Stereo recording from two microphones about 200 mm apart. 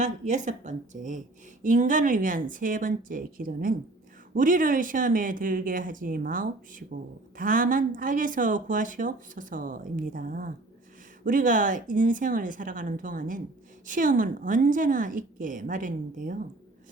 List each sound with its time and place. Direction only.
0.0 s a woman's voice: 35° right (ahead or behind)